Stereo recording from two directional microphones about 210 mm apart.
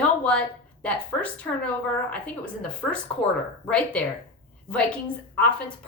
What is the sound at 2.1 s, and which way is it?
Speech, 5° left (ahead or behind).